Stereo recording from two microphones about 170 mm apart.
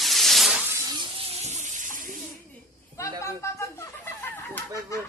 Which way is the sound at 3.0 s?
15° left (ahead or behind).